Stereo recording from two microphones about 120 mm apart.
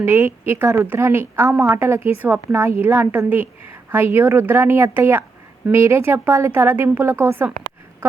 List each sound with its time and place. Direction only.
0.0 s a woman's voice: 15° right (ahead or behind)